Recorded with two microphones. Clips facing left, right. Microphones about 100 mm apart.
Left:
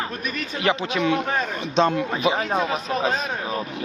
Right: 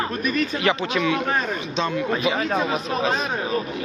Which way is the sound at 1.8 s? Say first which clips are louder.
Left 5 dB; 50° left (ahead or behind).